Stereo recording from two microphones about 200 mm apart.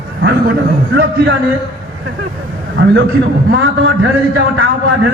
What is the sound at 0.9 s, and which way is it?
Speech, 50° right (ahead or behind).